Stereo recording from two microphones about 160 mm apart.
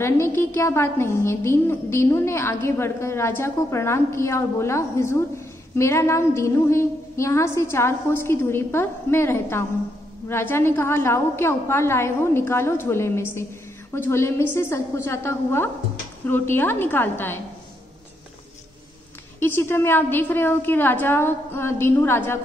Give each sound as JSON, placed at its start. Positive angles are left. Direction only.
{"t": 0.0, "sound": "a woman's voice", "side_deg": 15}
{"t": 19.4, "sound": "a woman's voice", "side_deg": 15}